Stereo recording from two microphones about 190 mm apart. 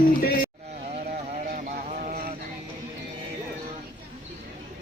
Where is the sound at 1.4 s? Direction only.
40° right (ahead or behind).